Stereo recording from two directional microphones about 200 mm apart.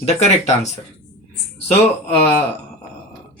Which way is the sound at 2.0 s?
10° left (ahead or behind).